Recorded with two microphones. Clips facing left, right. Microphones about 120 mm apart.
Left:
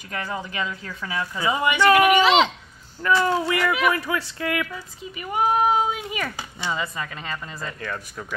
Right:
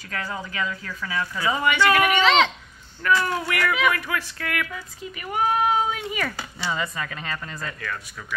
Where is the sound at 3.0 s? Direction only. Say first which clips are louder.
Left 2 dB; 25° left (ahead or behind).